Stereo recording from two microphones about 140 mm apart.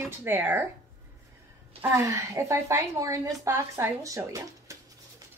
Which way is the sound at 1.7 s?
20° right (ahead or behind).